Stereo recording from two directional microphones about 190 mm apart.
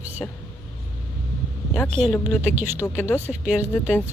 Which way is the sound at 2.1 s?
20° left (ahead or behind).